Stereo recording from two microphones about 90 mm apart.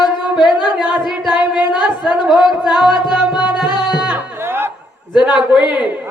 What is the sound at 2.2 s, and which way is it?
Music, centre (ahead or behind).